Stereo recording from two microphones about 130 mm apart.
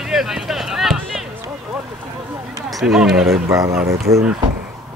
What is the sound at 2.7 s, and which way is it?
Speech, centre (ahead or behind).